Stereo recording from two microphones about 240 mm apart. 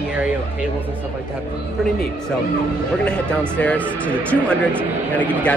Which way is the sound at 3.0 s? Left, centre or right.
Centre.